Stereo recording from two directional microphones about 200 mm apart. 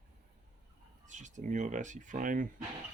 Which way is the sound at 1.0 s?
40° right (ahead or behind).